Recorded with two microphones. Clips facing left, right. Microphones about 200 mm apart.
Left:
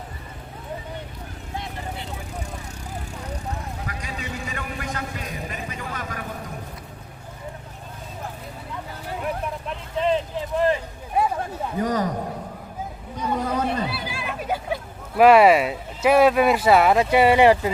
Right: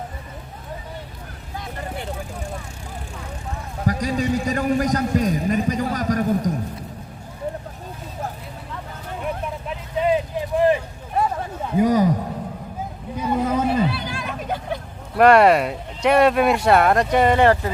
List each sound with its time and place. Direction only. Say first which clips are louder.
3.8 s a man's voice: right 12 dB; 40° right (ahead or behind)
9.2 s vehicle: right 1 dB; 5° right (ahead or behind)
11.1 s a sound: even; 10° left (ahead or behind)
11.8 s a man's voice: right 7 dB; 10° right (ahead or behind)
13.1 s hubbub: right 3 dB; 5° right (ahead or behind); by 17.7 s 10° left (ahead or behind)